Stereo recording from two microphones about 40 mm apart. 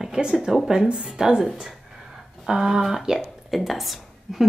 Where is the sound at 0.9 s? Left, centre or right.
Centre.